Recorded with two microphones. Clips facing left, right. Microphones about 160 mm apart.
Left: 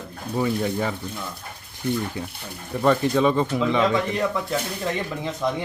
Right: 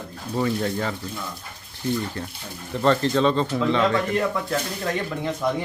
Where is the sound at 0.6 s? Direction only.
15° left (ahead or behind).